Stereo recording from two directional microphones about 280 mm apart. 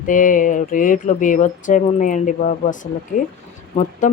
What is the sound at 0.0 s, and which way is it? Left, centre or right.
Speech, left.